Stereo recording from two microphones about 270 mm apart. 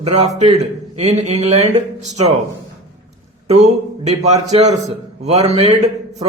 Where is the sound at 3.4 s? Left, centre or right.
Right.